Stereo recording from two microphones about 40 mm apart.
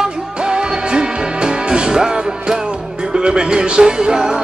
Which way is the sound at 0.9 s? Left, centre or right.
Right.